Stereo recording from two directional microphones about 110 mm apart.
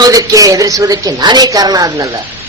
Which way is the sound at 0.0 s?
30° right (ahead or behind).